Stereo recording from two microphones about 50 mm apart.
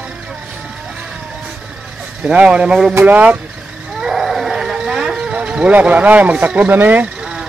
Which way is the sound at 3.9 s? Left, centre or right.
Centre.